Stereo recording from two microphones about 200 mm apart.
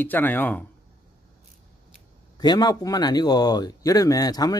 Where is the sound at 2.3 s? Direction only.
20° left (ahead or behind).